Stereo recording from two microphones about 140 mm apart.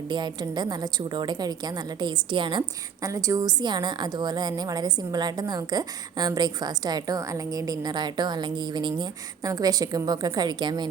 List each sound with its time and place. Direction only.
0.1 s a woman's voice: 30° right (ahead or behind)